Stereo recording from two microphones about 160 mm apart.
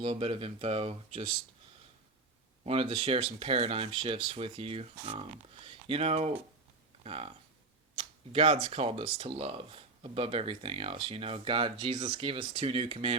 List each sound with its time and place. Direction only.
0.0 s speech: 35° right (ahead or behind)
2.6 s speech: 35° right (ahead or behind)